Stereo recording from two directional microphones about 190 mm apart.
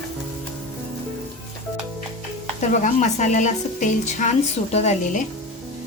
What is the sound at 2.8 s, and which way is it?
A woman's voice, 40° left (ahead or behind).